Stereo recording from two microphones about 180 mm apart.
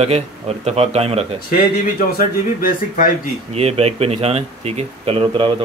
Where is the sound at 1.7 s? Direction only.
55° left (ahead or behind).